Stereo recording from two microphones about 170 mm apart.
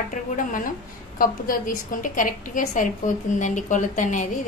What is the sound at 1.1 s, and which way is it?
A woman's voice, 55° left (ahead or behind).